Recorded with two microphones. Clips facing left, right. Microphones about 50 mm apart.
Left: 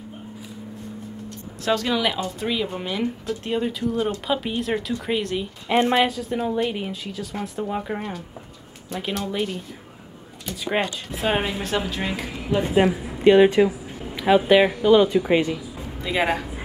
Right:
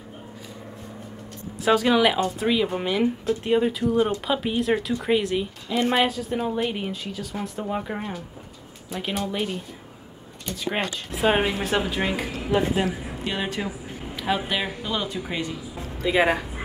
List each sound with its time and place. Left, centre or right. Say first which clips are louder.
1.6 s a woman's voice: right 3 dB; centre
4.3 s a woman's voice: right 1 dB; centre
12.7 s speech: left 6 dB; left
14.1 s a sound: left 8 dB; centre
14.5 s speech: left 12 dB; left
16.0 s a woman's voice: right 2 dB; centre